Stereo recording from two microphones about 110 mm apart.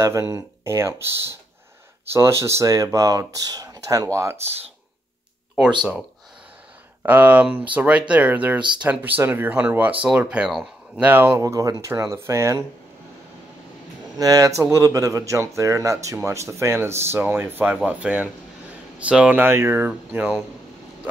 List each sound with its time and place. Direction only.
0.0 s speech: 30° right (ahead or behind)
7.0 s speech: 15° right (ahead or behind)
11.0 s speech: 20° right (ahead or behind)
14.1 s speech: 35° right (ahead or behind); by 20.4 s 10° right (ahead or behind)